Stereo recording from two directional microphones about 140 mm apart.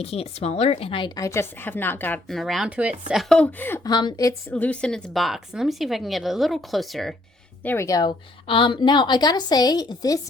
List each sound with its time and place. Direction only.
0.0 s a woman's voice: 45° left (ahead or behind); by 2.2 s 15° left (ahead or behind)
2.3 s speech: centre (ahead or behind)
3.8 s a woman's voice: 30° left (ahead or behind)
4.5 s speech: 10° left (ahead or behind)
7.6 s speech: 15° left (ahead or behind)
7.9 s a woman's voice: 25° left (ahead or behind)
8.4 s a woman's voice: 40° left (ahead or behind)